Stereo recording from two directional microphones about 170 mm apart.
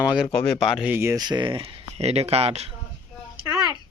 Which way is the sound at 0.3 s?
Centre (ahead or behind).